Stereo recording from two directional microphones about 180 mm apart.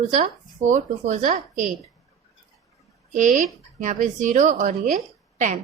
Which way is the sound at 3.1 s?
40° right (ahead or behind).